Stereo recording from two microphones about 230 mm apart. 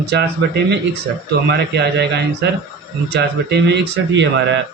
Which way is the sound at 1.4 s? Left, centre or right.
Right.